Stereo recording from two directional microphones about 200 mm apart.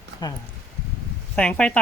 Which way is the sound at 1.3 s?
5° left (ahead or behind).